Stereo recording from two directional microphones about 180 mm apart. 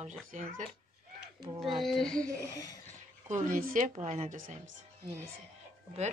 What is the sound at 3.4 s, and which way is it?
Speech, 45° right (ahead or behind).